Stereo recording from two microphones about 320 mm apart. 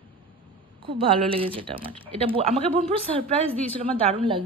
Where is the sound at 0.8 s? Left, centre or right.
Centre.